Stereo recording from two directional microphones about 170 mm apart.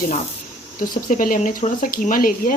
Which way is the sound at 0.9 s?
55° left (ahead or behind).